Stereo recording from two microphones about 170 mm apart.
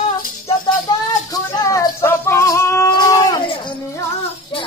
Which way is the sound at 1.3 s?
20° left (ahead or behind).